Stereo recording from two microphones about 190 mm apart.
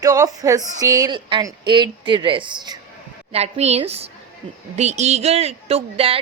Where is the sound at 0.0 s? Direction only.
20° right (ahead or behind).